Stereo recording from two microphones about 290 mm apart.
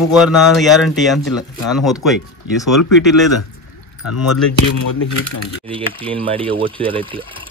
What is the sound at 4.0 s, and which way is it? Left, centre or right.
Speech, left.